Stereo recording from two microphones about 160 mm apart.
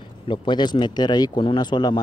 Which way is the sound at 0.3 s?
30° left (ahead or behind).